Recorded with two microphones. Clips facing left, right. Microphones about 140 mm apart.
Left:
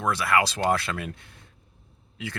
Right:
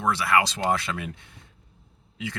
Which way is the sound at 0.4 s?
20° right (ahead or behind).